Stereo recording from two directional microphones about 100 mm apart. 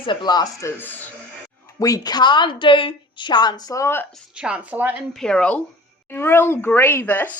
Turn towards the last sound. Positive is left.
turn(degrees=20)  # may be behind; listen again after turning